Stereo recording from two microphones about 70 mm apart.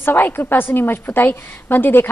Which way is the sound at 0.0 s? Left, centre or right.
Left.